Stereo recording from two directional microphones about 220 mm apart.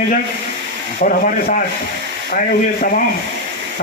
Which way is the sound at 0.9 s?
35° left (ahead or behind).